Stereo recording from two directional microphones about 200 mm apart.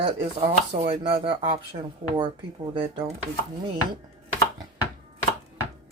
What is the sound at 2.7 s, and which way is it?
Speech, 25° right (ahead or behind).